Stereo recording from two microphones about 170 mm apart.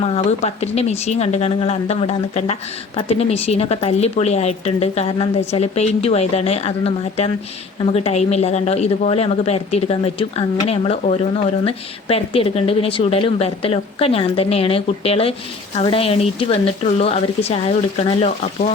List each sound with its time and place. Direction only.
0.0 s speech: 40° left (ahead or behind)